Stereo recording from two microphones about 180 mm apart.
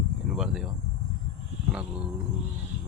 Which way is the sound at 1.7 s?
5° right (ahead or behind).